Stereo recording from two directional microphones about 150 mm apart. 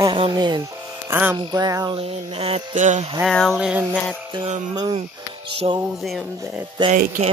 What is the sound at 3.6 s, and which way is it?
Speech, 5° right (ahead or behind).